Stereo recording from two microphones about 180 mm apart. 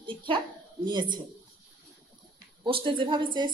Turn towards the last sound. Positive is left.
turn(degrees=-25)  # may be behind; listen again after turning